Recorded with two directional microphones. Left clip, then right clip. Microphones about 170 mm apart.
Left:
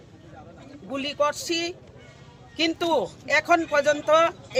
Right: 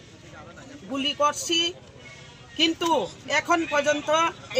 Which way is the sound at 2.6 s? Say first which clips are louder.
Right 1 dB; 20° left (ahead or behind).